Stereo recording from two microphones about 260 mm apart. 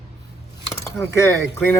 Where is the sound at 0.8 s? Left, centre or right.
Centre.